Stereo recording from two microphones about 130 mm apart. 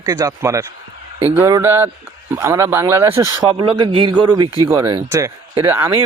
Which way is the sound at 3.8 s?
40° right (ahead or behind).